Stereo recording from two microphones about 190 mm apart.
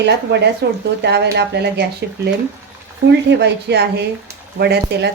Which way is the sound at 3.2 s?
65° right (ahead or behind).